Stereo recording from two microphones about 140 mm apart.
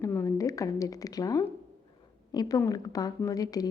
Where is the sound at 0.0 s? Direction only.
20° left (ahead or behind).